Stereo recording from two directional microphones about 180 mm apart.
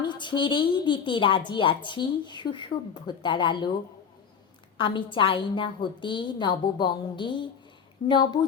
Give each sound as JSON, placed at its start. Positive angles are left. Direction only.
{"t": 0.0, "sound": "a woman's voice", "side_deg": 25}
{"t": 4.8, "sound": "a woman's voice", "side_deg": 25}